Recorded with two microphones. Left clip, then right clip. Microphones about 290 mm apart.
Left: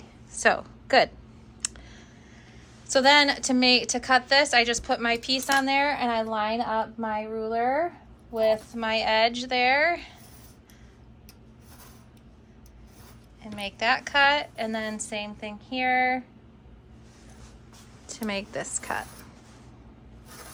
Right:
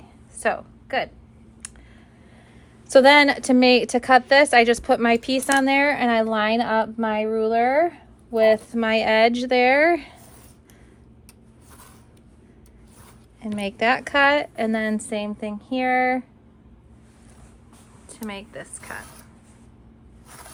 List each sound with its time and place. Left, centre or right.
0.3 s a woman's voice: centre
1.6 s a sound: centre
2.9 s a woman's voice: right
13.4 s a woman's voice: right
18.1 s a woman's voice: centre